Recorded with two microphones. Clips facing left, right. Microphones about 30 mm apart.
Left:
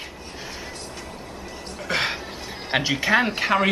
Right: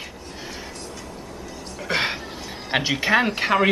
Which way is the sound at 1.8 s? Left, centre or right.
Centre.